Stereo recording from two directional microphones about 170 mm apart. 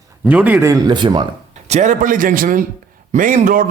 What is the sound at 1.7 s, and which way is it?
A man's voice, 45° right (ahead or behind).